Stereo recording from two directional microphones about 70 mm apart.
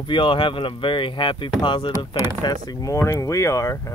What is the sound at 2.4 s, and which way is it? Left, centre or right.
Speech, left.